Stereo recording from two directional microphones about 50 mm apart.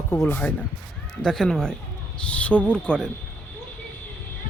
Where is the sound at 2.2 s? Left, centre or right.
Left.